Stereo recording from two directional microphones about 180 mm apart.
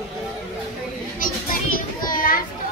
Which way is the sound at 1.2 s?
50° left (ahead or behind).